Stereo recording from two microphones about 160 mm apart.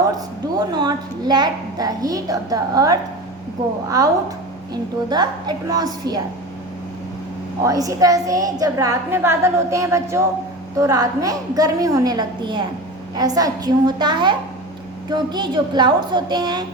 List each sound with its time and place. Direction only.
0.5 s a woman's voice: 25° right (ahead or behind)
7.6 s a woman's voice: 20° right (ahead or behind)